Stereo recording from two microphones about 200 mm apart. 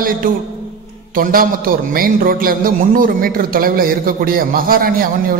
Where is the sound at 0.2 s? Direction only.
45° right (ahead or behind).